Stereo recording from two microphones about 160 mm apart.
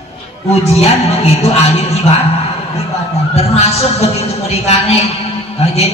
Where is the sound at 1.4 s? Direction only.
40° left (ahead or behind).